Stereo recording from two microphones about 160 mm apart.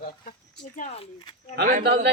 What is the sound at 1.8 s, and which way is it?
Speech, 90° right.